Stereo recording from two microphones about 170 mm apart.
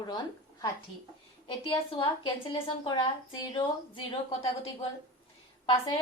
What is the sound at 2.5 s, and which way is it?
A woman's voice, 30° left (ahead or behind).